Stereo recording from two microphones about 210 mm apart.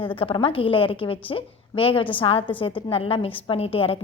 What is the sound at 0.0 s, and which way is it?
A woman's voice, 25° left (ahead or behind).